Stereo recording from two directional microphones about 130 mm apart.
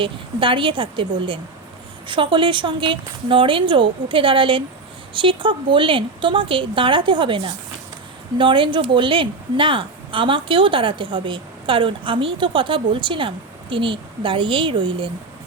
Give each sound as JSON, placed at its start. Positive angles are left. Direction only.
{"t": 0.0, "sound": "a woman's voice", "side_deg": -40}